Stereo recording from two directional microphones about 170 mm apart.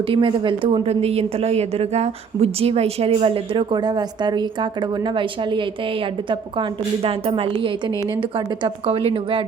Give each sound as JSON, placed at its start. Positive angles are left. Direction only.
{"t": 0.1, "sound": "a woman's voice", "side_deg": -30}